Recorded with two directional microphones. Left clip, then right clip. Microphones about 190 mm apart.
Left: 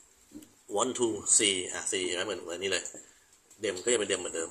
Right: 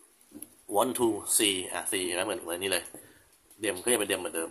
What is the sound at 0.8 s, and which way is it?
Speech, 25° right (ahead or behind).